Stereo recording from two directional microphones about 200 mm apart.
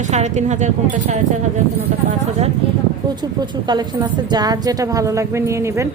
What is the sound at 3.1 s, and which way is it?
A woman's voice, 20° right (ahead or behind).